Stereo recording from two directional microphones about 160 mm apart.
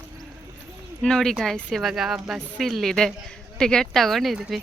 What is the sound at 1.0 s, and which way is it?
Speech, 5° left (ahead or behind).